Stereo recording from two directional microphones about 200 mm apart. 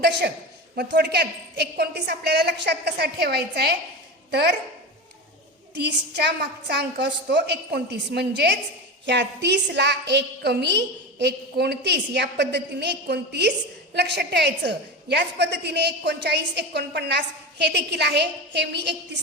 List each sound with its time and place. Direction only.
0.0 s a woman's voice: 60° right (ahead or behind)
5.7 s a woman's voice: 55° right (ahead or behind)